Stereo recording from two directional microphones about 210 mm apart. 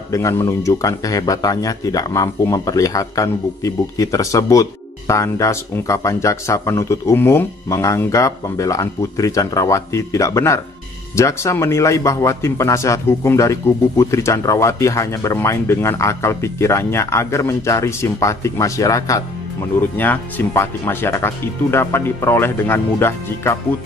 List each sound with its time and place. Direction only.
0.1 s speech: 15° left (ahead or behind)